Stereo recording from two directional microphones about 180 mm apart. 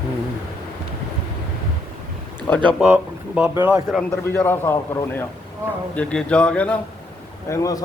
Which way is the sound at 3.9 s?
10° left (ahead or behind).